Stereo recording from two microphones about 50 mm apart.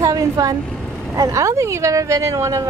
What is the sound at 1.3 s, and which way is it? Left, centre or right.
A woman's voice, right.